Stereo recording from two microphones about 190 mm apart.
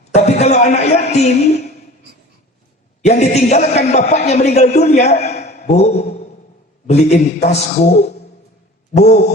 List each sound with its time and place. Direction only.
0.1 s a man's voice: 35° left (ahead or behind)
3.1 s a man's voice: 35° left (ahead or behind)